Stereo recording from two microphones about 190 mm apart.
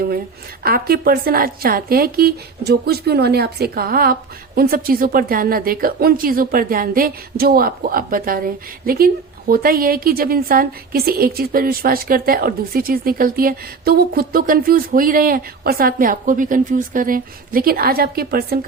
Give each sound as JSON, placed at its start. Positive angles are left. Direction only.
{"t": 0.6, "sound": "a woman's voice", "side_deg": -50}